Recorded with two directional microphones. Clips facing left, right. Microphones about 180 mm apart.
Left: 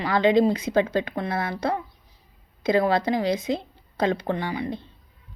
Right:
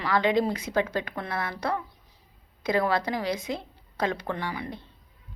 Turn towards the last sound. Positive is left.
turn(degrees=25)  # may be behind; listen again after turning